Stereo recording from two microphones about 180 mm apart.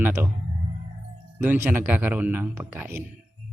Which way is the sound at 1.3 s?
10° right (ahead or behind).